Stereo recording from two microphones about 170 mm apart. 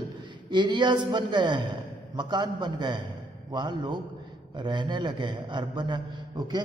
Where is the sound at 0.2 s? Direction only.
25° right (ahead or behind).